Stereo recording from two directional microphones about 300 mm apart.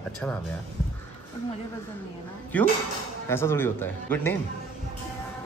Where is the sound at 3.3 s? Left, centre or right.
Centre.